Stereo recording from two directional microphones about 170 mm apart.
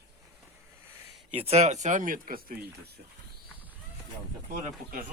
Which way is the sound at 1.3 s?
35° right (ahead or behind).